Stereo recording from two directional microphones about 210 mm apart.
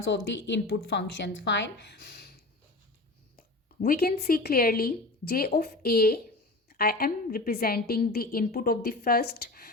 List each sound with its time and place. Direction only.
0.1 s speech: 55° left (ahead or behind)
3.8 s a woman's voice: 45° left (ahead or behind)